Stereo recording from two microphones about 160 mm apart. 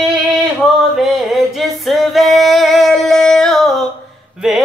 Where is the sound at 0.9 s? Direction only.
Centre (ahead or behind).